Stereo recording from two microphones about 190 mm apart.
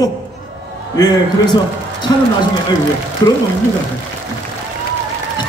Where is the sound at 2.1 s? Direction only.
20° left (ahead or behind).